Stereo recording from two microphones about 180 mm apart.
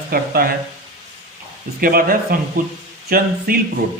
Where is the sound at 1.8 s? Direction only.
55° right (ahead or behind).